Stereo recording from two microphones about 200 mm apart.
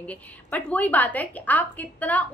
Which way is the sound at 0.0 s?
5° left (ahead or behind).